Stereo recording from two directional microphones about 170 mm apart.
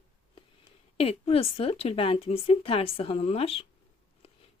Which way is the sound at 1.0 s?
35° left (ahead or behind).